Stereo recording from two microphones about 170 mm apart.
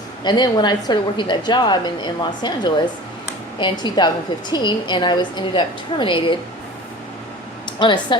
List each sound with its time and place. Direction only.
0.3 s a woman's voice: 25° left (ahead or behind)
7.8 s speech: 25° left (ahead or behind)